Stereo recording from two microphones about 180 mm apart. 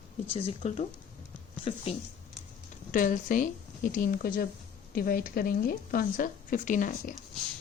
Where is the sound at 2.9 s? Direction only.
50° left (ahead or behind).